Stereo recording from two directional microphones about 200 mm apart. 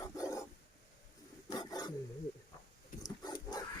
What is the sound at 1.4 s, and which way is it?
Wild animals, 20° left (ahead or behind).